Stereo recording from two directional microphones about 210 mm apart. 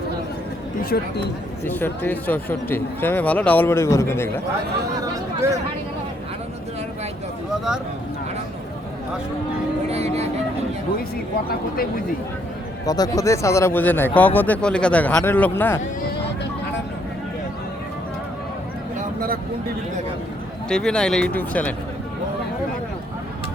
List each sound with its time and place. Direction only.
0.8 s speech: 45° left (ahead or behind)
1.6 s speech: 10° left (ahead or behind)
9.9 s speech: 30° right (ahead or behind)
12.8 s speech: 15° left (ahead or behind)
20.7 s speech: 5° left (ahead or behind)